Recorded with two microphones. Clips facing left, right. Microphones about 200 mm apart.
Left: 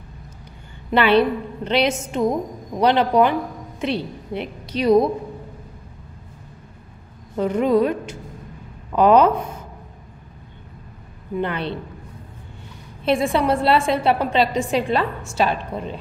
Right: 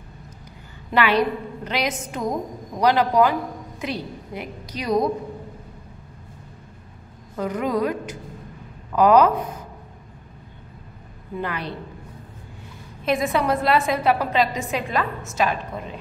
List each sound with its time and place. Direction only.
0.9 s a woman's voice: 30° left (ahead or behind)
7.3 s a woman's voice: 25° left (ahead or behind)
11.4 s a woman's voice: 25° left (ahead or behind)
13.0 s a woman's voice: 30° left (ahead or behind)